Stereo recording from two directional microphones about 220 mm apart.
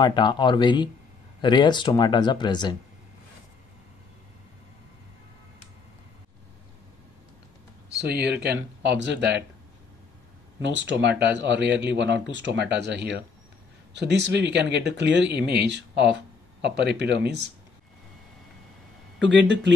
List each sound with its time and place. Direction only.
0.0 s speech: 20° left (ahead or behind)
8.0 s speech: 50° right (ahead or behind)
10.6 s speech: 55° right (ahead or behind)
19.2 s speech: 55° right (ahead or behind)